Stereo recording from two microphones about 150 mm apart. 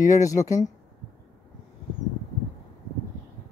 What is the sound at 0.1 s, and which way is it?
Speech, 20° left (ahead or behind).